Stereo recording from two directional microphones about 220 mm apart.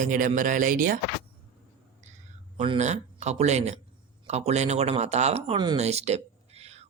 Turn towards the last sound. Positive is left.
turn(degrees=-30)  # may be behind; listen again after turning